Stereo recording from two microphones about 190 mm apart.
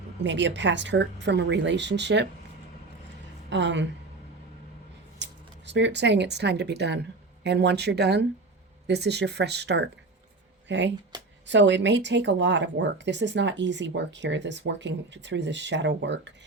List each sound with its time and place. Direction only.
0.2 s speech: 70° right (ahead or behind)
3.5 s speech: 70° right (ahead or behind)
5.2 s speech: 70° right (ahead or behind)